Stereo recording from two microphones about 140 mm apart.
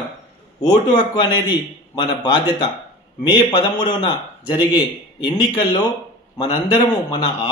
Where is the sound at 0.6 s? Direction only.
30° left (ahead or behind).